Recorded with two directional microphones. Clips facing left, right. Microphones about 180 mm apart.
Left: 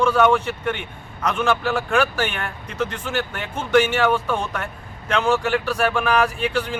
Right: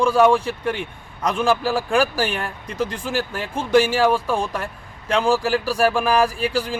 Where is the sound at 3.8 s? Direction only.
35° right (ahead or behind).